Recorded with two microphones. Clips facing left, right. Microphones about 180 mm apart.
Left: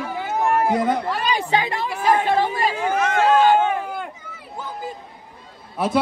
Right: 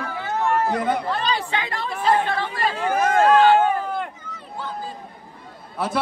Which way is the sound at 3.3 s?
10° left (ahead or behind).